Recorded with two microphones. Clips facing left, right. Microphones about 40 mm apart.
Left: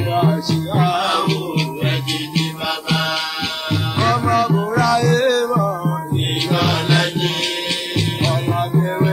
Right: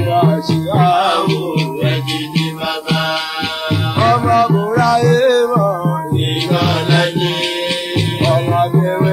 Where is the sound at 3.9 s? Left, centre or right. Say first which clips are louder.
Right 5 dB; centre.